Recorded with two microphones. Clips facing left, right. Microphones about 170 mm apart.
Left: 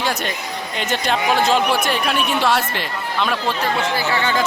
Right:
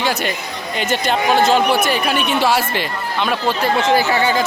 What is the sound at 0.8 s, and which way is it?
Speech, centre (ahead or behind).